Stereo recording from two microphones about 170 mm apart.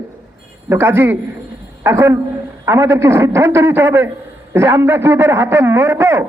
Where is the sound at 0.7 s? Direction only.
15° right (ahead or behind).